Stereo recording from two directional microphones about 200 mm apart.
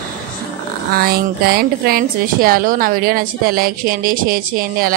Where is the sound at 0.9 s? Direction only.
50° right (ahead or behind).